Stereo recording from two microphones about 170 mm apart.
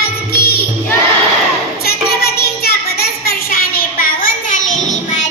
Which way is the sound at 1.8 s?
65° left (ahead or behind).